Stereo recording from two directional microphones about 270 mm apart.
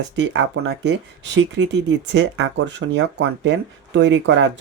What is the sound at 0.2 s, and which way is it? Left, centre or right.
Speech, right.